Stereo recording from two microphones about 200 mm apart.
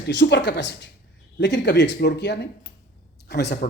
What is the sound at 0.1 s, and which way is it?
Speech, 60° left (ahead or behind).